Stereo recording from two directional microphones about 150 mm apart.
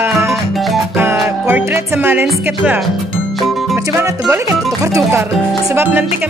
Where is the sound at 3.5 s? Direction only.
Centre (ahead or behind).